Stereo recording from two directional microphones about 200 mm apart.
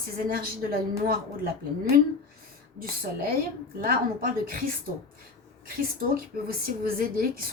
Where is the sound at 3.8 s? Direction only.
45° right (ahead or behind).